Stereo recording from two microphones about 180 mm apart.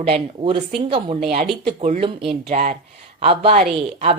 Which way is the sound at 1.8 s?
35° right (ahead or behind).